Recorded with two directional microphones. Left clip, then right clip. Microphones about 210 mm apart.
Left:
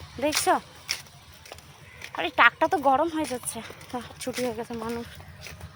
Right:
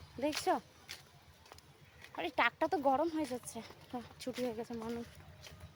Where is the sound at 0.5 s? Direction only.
20° right (ahead or behind).